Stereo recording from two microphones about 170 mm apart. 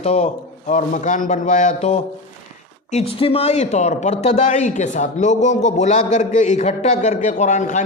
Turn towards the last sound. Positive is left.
turn(degrees=45)  # may be behind; listen again after turning